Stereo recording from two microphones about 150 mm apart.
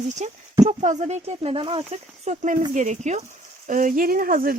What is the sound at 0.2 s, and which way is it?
Speech, 50° right (ahead or behind).